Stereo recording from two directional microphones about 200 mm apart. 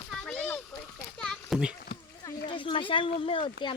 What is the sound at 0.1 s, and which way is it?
Splash, 5° left (ahead or behind).